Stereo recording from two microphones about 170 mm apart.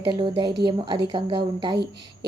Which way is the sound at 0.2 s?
30° right (ahead or behind).